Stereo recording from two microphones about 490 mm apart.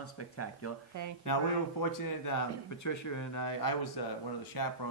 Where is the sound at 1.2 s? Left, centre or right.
Left.